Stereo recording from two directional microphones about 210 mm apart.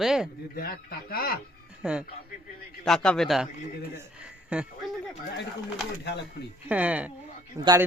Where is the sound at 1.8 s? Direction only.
5° right (ahead or behind).